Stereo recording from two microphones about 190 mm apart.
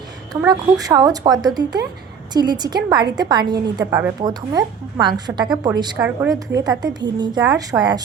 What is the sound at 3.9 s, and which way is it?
Speech, 10° right (ahead or behind).